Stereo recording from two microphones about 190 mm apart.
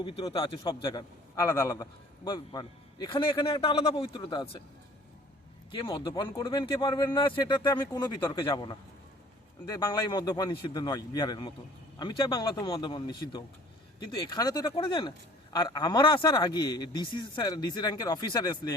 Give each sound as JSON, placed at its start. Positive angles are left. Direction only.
{"t": 0.0, "sound": "a man's voice", "side_deg": 30}
{"t": 5.7, "sound": "a man's voice", "side_deg": 25}